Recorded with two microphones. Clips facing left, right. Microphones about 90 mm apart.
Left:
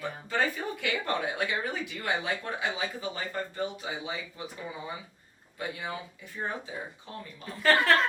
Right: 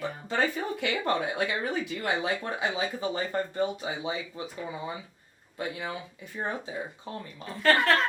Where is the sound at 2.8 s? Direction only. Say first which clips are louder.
Right 4 dB; 30° right (ahead or behind).